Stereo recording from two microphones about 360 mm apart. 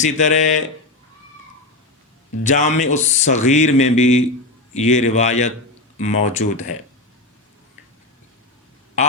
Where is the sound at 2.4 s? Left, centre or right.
Centre.